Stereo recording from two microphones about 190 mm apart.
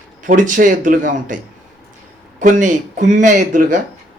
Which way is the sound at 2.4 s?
40° right (ahead or behind).